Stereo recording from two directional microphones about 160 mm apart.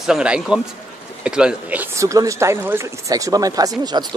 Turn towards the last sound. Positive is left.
turn(degrees=-25)  # may be behind; listen again after turning